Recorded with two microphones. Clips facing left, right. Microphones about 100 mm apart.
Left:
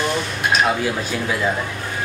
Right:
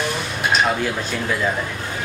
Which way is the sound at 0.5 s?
5° left (ahead or behind).